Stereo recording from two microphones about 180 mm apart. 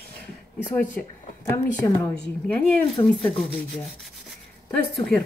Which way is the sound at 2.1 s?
5° left (ahead or behind).